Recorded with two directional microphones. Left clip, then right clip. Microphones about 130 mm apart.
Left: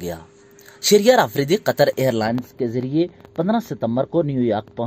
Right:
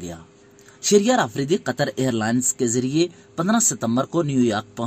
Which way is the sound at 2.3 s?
10° left (ahead or behind).